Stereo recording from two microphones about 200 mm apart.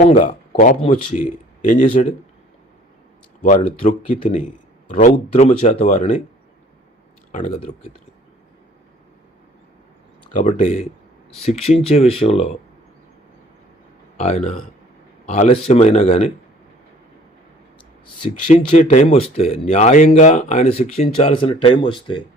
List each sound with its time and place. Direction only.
0.0 s speech: 35° left (ahead or behind)
0.8 s speech: 25° left (ahead or behind)
1.2 s speech: 40° left (ahead or behind)
3.4 s speech: 35° left (ahead or behind)
7.3 s speech: 40° left (ahead or behind)
10.3 s speech: 35° left (ahead or behind)
14.2 s speech: 35° left (ahead or behind)
18.0 s speech: 25° left (ahead or behind)